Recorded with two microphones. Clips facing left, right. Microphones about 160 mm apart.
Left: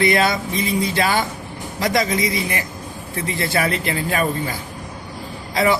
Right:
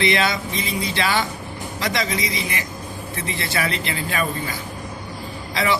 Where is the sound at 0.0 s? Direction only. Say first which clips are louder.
Left 3 dB; 50° left (ahead or behind).